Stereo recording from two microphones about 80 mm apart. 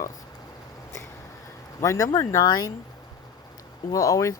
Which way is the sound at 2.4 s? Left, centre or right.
Left.